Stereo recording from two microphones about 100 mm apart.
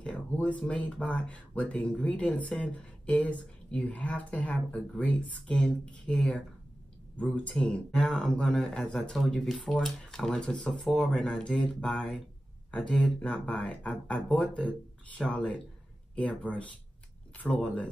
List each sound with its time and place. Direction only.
0.0 s speech: 10° left (ahead or behind)